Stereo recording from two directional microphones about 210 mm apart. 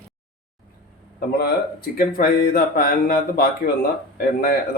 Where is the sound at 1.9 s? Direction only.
50° left (ahead or behind).